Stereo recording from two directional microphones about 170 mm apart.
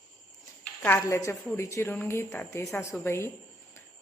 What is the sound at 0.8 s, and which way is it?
A woman's voice, 10° left (ahead or behind).